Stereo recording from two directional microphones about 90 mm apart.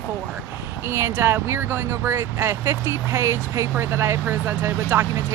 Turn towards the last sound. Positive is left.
turn(degrees=-25)  # may be behind; listen again after turning